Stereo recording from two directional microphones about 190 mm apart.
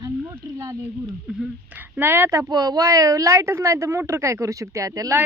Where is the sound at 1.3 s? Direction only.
5° right (ahead or behind).